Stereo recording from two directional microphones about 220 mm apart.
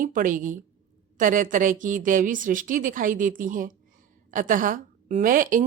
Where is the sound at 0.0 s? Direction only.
35° right (ahead or behind).